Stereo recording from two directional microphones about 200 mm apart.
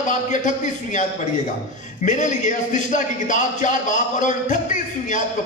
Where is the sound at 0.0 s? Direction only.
40° left (ahead or behind).